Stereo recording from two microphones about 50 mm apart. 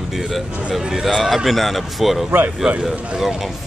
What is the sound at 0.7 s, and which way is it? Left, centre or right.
Speech, centre.